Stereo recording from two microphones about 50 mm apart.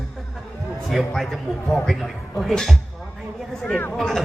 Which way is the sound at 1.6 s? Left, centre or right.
Centre.